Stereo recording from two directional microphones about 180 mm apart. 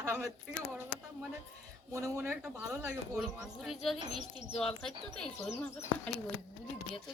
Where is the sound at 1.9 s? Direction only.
15° right (ahead or behind); by 5.7 s 5° left (ahead or behind).